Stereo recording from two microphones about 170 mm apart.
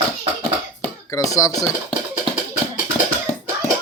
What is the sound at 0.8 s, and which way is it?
Dishes, 15° left (ahead or behind).